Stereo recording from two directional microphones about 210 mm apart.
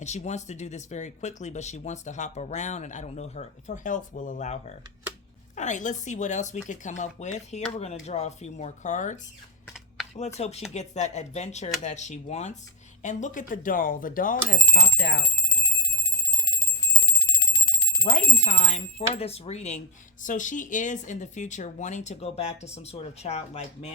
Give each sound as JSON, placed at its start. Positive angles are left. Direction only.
{"t": 0.0, "sound": "speech", "side_deg": 35}
{"t": 10.2, "sound": "speech", "side_deg": 30}
{"t": 17.0, "sound": "bicycle bell", "side_deg": 25}
{"t": 18.1, "sound": "speech", "side_deg": 35}